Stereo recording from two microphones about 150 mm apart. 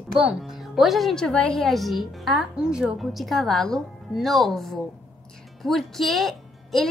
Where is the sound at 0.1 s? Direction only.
5° right (ahead or behind).